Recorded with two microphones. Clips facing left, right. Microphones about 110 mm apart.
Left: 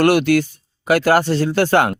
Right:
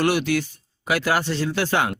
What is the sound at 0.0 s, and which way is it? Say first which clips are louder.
Speech: left 7 dB; 55° left (ahead or behind).